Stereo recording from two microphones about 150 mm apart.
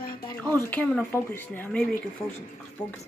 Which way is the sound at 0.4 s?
10° left (ahead or behind).